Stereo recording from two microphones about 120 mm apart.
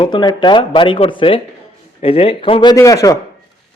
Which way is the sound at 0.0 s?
40° left (ahead or behind).